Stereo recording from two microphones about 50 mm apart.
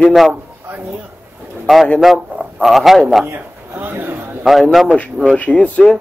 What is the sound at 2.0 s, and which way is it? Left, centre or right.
A man's voice, centre.